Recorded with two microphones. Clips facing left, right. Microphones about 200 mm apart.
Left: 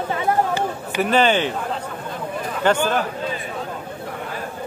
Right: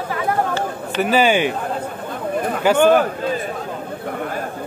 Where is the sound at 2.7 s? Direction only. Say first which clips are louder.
Right 2 dB; 10° right (ahead or behind).